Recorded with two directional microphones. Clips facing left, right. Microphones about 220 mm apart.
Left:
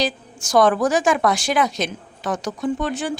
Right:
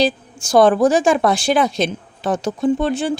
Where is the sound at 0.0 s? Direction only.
30° right (ahead or behind).